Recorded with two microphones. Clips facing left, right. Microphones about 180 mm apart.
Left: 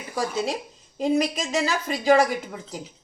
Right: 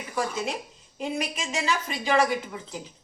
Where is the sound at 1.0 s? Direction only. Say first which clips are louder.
Left 8 dB; 35° left (ahead or behind).